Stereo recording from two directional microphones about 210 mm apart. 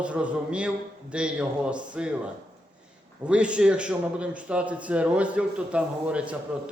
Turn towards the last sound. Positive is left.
turn(degrees=-5)  # may be behind; listen again after turning